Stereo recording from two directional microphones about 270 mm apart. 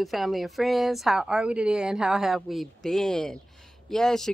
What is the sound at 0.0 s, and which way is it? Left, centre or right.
Speech, centre.